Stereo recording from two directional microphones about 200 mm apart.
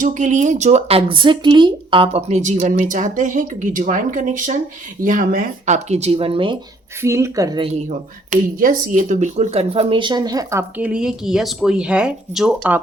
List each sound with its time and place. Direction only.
0.0 s speech: 40° right (ahead or behind)
7.0 s speech: 15° right (ahead or behind)
7.8 s speech: 40° right (ahead or behind); by 12.8 s 5° right (ahead or behind)